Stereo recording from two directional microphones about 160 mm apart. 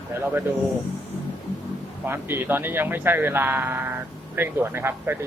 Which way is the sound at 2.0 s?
15° right (ahead or behind).